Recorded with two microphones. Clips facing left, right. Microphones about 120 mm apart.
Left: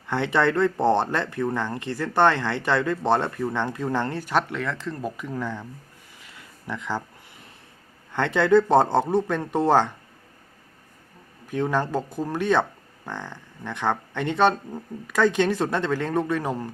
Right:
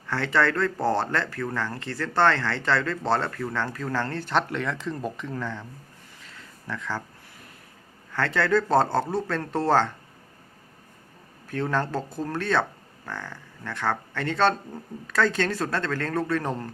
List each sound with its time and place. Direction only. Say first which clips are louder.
0.1 s speech: left 2 dB; 20° left (ahead or behind)
4.2 s speech: left 1 dB; 5° left (ahead or behind)
6.1 s a sound: left 1 dB; 15° left (ahead or behind)
8.1 s speech: left 5 dB; 20° left (ahead or behind)
11.4 s speech: left 2 dB; 15° left (ahead or behind)